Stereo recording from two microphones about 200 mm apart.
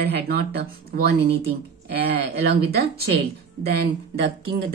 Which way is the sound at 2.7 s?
50° right (ahead or behind).